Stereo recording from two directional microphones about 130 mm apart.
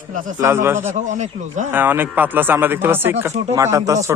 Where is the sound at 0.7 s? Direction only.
70° right (ahead or behind).